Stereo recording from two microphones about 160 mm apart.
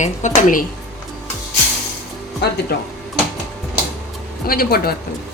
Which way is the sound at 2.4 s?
90° left.